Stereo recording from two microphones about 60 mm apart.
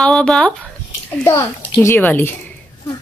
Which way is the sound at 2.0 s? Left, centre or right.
Left.